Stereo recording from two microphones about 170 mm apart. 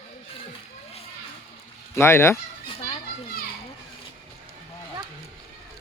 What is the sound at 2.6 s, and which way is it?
Children playing, 30° left (ahead or behind).